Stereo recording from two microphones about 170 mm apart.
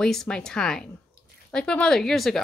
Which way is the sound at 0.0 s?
5° left (ahead or behind).